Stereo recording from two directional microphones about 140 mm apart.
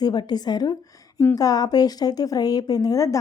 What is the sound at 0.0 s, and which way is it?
A woman's voice, 30° left (ahead or behind).